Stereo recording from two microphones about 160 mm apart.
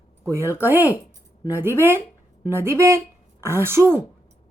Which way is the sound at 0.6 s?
10° right (ahead or behind).